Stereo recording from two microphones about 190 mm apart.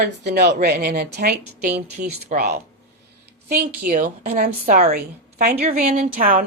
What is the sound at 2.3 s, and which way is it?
Speech, 40° right (ahead or behind).